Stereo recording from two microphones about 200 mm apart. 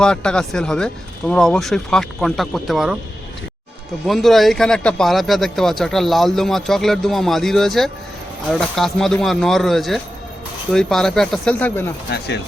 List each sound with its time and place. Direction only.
0.0 s speech: 5° left (ahead or behind)
4.0 s speech: centre (ahead or behind)